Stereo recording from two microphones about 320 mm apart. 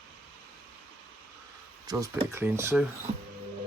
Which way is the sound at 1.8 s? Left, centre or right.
Centre.